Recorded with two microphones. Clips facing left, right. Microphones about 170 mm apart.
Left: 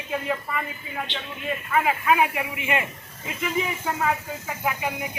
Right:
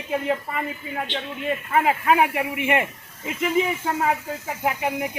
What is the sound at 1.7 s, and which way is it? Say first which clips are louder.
Speech: right 2 dB; 30° right (ahead or behind).